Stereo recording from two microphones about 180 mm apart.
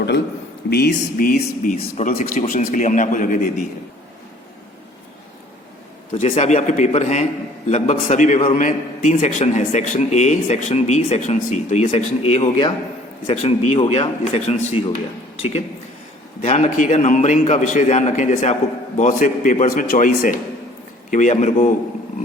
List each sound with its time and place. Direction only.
0.7 s a man's voice: 60° left (ahead or behind)
2.4 s a man's voice: 40° left (ahead or behind)
6.1 s a man's voice: 35° left (ahead or behind)